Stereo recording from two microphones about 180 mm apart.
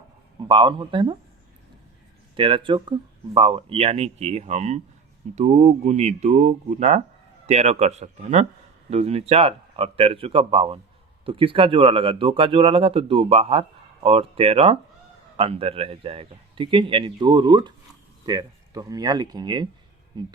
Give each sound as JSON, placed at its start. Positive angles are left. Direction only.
{"t": 0.4, "sound": "speech", "side_deg": -25}
{"t": 2.3, "sound": "speech", "side_deg": -30}